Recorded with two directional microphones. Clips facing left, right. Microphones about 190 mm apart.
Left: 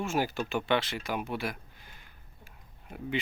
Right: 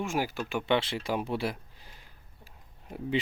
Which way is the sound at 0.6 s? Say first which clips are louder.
Right 5 dB; 25° right (ahead or behind).